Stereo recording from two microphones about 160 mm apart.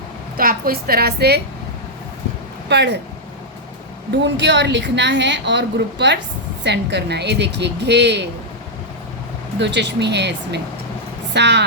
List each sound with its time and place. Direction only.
0.3 s a woman's voice: 65° right (ahead or behind); by 1.4 s 85° right
2.6 s a woman's voice: 90° right
4.2 s a woman's voice: 90° right
9.6 s a woman's voice: 90° right